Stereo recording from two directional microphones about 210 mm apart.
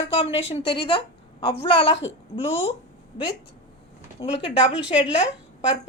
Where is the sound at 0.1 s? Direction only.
25° left (ahead or behind).